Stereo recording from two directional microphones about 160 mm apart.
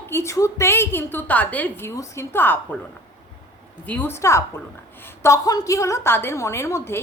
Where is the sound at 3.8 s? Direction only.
10° left (ahead or behind).